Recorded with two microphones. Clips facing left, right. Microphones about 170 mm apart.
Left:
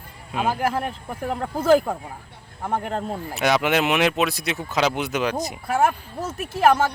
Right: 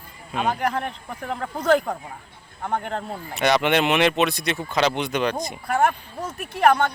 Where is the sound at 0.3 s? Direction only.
5° left (ahead or behind).